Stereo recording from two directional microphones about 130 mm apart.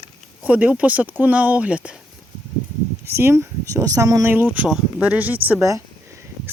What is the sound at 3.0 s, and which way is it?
Speech, 20° right (ahead or behind).